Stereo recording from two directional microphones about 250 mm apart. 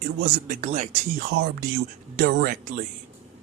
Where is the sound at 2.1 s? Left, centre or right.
Right.